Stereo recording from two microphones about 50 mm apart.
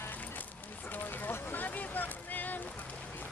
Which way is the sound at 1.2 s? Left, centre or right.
Left.